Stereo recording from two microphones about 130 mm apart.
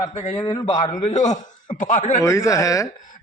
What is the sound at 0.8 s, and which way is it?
Speech, 70° left (ahead or behind).